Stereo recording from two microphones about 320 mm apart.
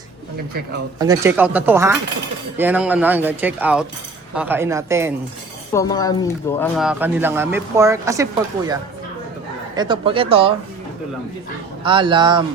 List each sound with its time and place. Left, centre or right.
0.9 s speech: centre
5.7 s speech: centre
11.8 s speech: centre